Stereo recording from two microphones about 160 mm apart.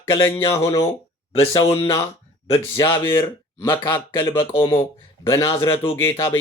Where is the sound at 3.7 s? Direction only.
30° left (ahead or behind).